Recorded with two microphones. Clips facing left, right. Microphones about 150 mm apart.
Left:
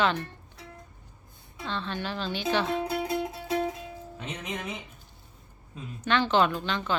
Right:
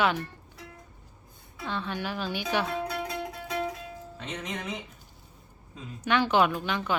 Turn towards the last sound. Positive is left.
turn(degrees=-10)  # may be behind; listen again after turning